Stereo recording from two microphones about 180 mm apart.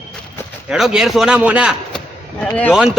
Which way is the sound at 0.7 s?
5° right (ahead or behind).